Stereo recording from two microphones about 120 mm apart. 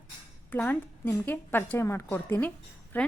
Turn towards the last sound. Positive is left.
turn(degrees=15)  # may be behind; listen again after turning